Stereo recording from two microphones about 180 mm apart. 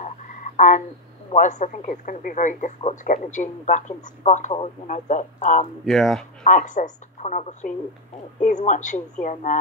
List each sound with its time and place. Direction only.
0.6 s frog: 45° left (ahead or behind)
1.3 s speech: 40° left (ahead or behind)
5.9 s speech: centre (ahead or behind)
6.4 s speech: 45° left (ahead or behind)